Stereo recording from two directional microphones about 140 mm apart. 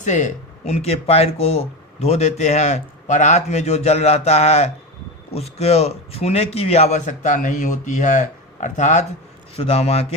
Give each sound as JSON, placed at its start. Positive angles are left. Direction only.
{"t": 0.0, "sound": "a man's voice", "side_deg": 60}
{"t": 9.6, "sound": "speech", "side_deg": 45}